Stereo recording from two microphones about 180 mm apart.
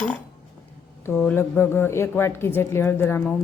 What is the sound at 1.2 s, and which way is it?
A woman's voice, 15° left (ahead or behind).